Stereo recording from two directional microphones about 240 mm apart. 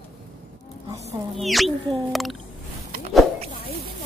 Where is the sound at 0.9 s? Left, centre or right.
Right.